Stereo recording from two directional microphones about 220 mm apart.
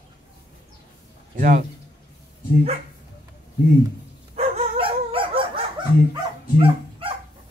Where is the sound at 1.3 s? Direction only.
35° right (ahead or behind).